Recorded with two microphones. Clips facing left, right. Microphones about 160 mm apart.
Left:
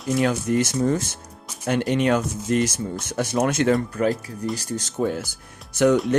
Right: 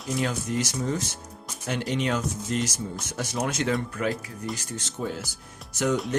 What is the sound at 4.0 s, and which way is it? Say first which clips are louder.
Speech: left 6 dB; 35° left (ahead or behind).